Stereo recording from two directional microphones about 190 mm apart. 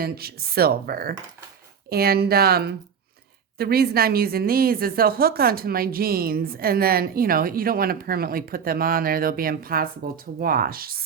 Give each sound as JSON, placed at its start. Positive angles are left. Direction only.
{"t": 0.0, "sound": "a woman's voice", "side_deg": -55}